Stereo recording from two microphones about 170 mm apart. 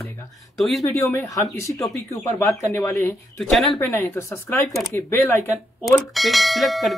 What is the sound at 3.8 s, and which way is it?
Speech, 15° left (ahead or behind).